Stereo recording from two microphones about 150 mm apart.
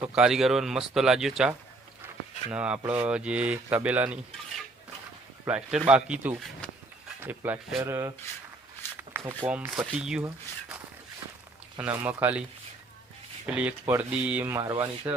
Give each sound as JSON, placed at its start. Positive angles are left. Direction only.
{"t": 0.0, "sound": "speech", "side_deg": -5}
{"t": 5.5, "sound": "speech", "side_deg": -10}
{"t": 9.4, "sound": "speech", "side_deg": -10}
{"t": 11.8, "sound": "speech", "side_deg": -10}
{"t": 13.5, "sound": "speech", "side_deg": -10}